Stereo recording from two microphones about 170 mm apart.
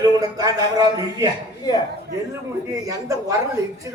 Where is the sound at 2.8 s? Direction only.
20° right (ahead or behind).